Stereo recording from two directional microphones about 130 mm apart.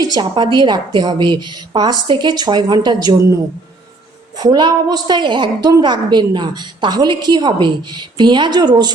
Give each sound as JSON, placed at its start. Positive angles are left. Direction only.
{"t": 0.0, "sound": "a woman's voice", "side_deg": -30}
{"t": 4.4, "sound": "a woman's voice", "side_deg": -35}